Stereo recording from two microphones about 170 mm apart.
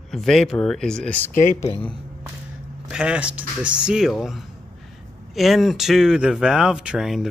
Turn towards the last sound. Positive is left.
turn(degrees=-5)  # may be behind; listen again after turning